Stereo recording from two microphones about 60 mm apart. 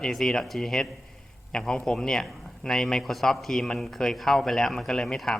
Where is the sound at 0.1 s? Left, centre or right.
Centre.